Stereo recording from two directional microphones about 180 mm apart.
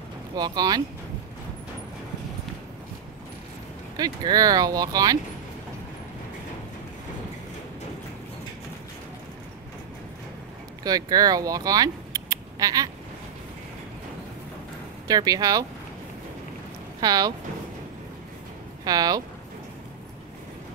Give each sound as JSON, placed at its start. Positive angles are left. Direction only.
{"t": 0.4, "sound": "speech", "side_deg": -20}
{"t": 3.9, "sound": "speech", "side_deg": -20}
{"t": 10.8, "sound": "speech", "side_deg": -20}
{"t": 15.0, "sound": "speech", "side_deg": -20}
{"t": 17.0, "sound": "speech", "side_deg": -20}
{"t": 18.9, "sound": "speech", "side_deg": -20}